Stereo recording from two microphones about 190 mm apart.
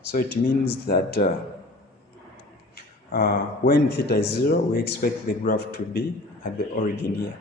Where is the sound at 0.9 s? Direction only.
50° left (ahead or behind).